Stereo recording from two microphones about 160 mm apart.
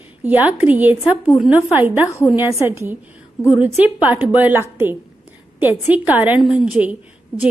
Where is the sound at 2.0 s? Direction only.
20° left (ahead or behind).